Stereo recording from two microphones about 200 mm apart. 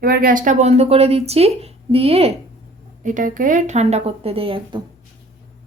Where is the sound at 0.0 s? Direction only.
45° right (ahead or behind); by 2.3 s 30° right (ahead or behind).